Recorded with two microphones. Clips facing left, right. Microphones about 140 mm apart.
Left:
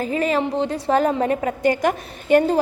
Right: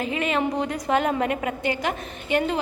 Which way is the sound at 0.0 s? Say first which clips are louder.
Left 4 dB; 40° left (ahead or behind).